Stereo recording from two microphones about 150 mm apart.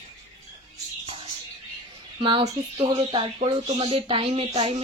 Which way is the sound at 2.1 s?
35° right (ahead or behind).